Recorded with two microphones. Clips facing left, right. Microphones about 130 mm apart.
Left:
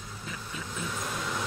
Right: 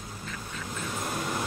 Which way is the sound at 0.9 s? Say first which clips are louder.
Right 4 dB; 45° right (ahead or behind).